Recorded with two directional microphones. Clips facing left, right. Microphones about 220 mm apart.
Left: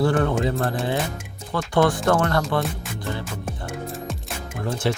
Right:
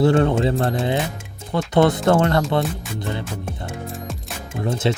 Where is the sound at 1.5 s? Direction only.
20° right (ahead or behind).